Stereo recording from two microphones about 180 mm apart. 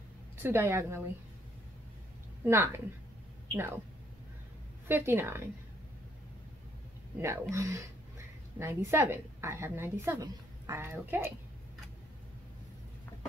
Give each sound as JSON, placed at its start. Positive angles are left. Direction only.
{"t": 0.4, "sound": "a woman's voice", "side_deg": -15}
{"t": 2.4, "sound": "a woman's voice", "side_deg": -15}
{"t": 4.8, "sound": "a woman's voice", "side_deg": -10}
{"t": 7.5, "sound": "a woman's voice", "side_deg": -15}